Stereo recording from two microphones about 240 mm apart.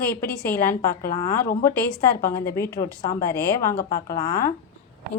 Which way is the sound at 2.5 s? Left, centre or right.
Centre.